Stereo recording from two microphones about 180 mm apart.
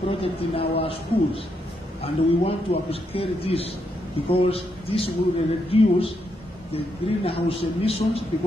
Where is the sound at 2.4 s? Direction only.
35° left (ahead or behind).